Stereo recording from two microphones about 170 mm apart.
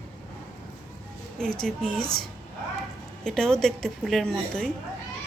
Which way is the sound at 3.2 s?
5° left (ahead or behind).